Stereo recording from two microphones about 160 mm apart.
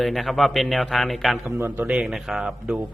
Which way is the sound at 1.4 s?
15° right (ahead or behind).